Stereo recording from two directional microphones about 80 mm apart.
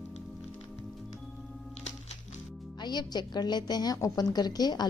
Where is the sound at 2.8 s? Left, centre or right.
Left.